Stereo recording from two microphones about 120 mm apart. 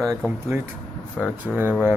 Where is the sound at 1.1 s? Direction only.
5° left (ahead or behind).